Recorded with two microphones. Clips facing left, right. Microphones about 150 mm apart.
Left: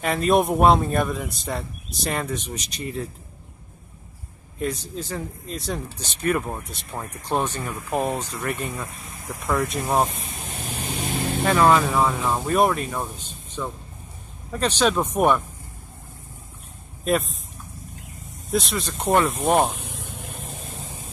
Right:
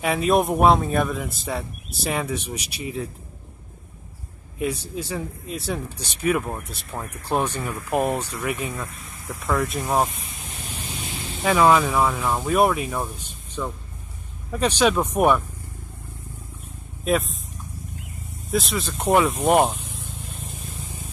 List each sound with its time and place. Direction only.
0.0 s speech: 5° right (ahead or behind)
4.6 s speech: 10° right (ahead or behind)
10.7 s vehicle: 55° left (ahead or behind)
11.4 s speech: 5° right (ahead or behind)
14.5 s speech: 10° right (ahead or behind)
17.0 s speech: centre (ahead or behind)
18.5 s speech: centre (ahead or behind)
19.8 s vehicle: 65° left (ahead or behind)